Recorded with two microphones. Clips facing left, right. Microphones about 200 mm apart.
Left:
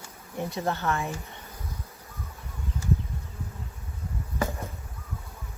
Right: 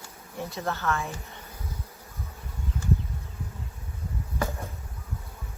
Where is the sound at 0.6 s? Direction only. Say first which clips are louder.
Left 1 dB; 15° left (ahead or behind).